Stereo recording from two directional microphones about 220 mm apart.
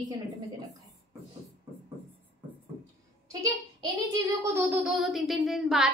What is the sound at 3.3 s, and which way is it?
A child's voice, 20° right (ahead or behind).